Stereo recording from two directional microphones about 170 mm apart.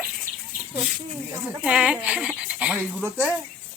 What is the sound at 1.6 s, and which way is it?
Speech, 5° right (ahead or behind).